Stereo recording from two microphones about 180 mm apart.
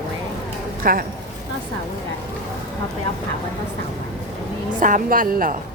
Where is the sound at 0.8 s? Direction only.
50° right (ahead or behind).